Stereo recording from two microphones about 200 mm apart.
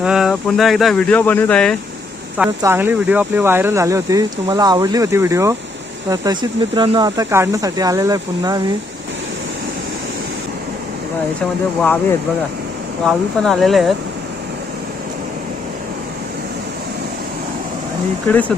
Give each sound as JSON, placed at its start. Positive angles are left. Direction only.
{"t": 0.0, "sound": "speech", "side_deg": -5}
{"t": 2.6, "sound": "speech", "side_deg": -10}
{"t": 13.1, "sound": "speech", "side_deg": 0}
{"t": 18.3, "sound": "speech", "side_deg": 5}